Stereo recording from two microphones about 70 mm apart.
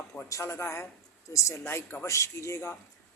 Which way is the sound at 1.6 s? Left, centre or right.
Left.